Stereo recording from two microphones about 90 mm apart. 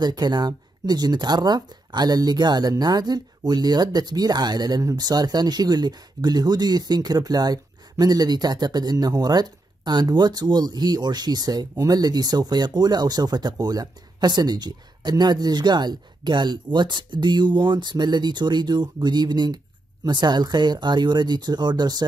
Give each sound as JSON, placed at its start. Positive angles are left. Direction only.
{"t": 0.0, "sound": "speech", "side_deg": -50}